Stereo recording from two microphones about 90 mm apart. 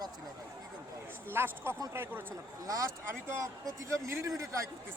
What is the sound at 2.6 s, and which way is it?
Speech, 40° right (ahead or behind).